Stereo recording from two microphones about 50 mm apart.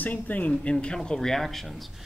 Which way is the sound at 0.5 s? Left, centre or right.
Centre.